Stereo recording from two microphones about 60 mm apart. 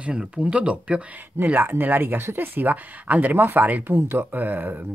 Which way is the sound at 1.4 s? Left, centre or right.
Right.